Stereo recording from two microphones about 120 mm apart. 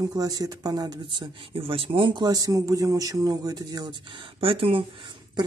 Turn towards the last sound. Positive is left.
turn(degrees=-50)  # may be behind; listen again after turning